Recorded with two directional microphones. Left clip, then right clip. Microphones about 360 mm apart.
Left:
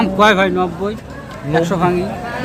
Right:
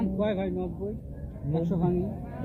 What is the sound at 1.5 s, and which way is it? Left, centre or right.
Speech, left.